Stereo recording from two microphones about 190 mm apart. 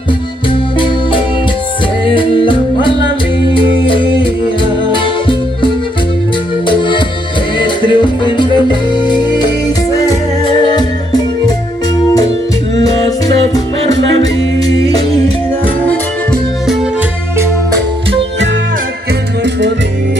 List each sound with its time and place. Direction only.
2.1 s music: 25° left (ahead or behind)
7.5 s music: 25° left (ahead or behind)
14.6 s music: 20° left (ahead or behind)